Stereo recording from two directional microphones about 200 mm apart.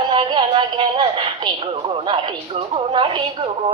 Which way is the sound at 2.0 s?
25° right (ahead or behind).